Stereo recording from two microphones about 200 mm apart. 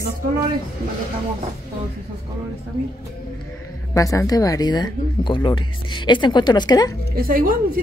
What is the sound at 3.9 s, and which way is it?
Speech, 15° left (ahead or behind).